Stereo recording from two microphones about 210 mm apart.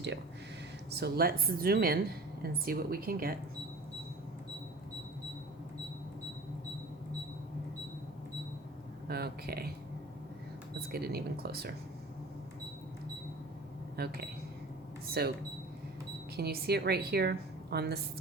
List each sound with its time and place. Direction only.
0.9 s speech: 50° right (ahead or behind)
9.0 s speech: 50° right (ahead or behind)
10.9 s speech: 50° right (ahead or behind)
13.9 s a woman's voice: 50° right (ahead or behind)